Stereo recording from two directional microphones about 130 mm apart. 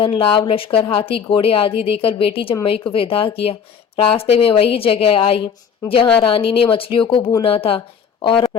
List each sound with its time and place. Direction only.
0.0 s speech: 45° left (ahead or behind)